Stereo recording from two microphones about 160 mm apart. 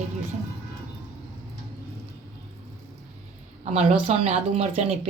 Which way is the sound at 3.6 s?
40° right (ahead or behind).